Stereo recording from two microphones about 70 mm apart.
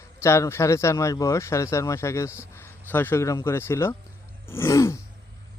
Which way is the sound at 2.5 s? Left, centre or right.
Left.